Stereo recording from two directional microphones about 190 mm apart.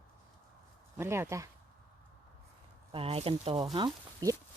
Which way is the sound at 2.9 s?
30° right (ahead or behind).